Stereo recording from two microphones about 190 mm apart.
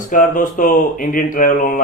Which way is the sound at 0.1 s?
45° left (ahead or behind).